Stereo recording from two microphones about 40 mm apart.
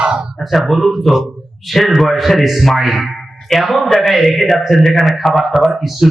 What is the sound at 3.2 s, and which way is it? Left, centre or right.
Music, centre.